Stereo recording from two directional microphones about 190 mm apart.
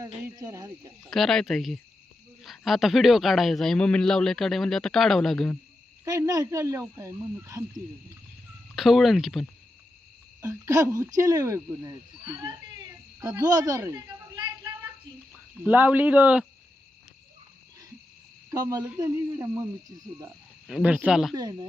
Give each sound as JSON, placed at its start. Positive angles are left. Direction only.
{"t": 0.3, "sound": "speech", "side_deg": -15}
{"t": 1.1, "sound": "speech", "side_deg": 0}
{"t": 6.1, "sound": "speech", "side_deg": -20}
{"t": 8.7, "sound": "speech", "side_deg": 0}
{"t": 10.4, "sound": "speech", "side_deg": -15}
{"t": 15.3, "sound": "speech", "side_deg": -10}
{"t": 18.5, "sound": "speech", "side_deg": -20}
{"t": 20.7, "sound": "speech", "side_deg": 0}
{"t": 21.3, "sound": "speech", "side_deg": -20}